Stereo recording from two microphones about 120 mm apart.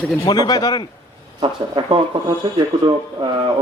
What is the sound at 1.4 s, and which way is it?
Speech, 45° right (ahead or behind).